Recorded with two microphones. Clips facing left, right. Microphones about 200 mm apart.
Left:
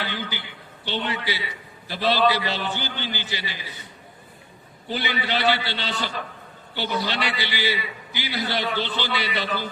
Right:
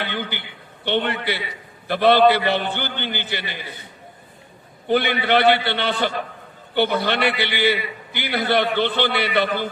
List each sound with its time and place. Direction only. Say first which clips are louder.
0.0 s a woman's voice: right 3 dB; 60° right (ahead or behind)
4.9 s a man's voice: right 8 dB; 55° right (ahead or behind)